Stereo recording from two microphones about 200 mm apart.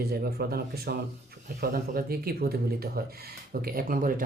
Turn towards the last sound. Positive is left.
turn(degrees=-45)  # may be behind; listen again after turning